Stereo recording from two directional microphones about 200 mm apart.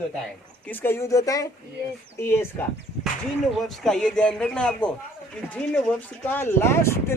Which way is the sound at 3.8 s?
5° left (ahead or behind).